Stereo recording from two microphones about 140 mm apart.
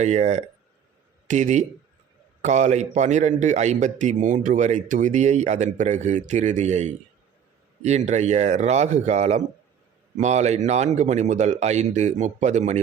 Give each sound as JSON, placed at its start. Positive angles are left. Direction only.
{"t": 0.0, "sound": "a man's voice", "side_deg": -55}